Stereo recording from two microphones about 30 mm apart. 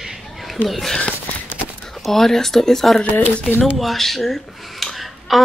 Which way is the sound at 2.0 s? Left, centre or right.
Centre.